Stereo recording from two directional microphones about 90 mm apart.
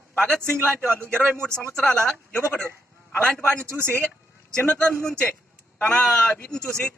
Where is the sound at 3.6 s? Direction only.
30° right (ahead or behind).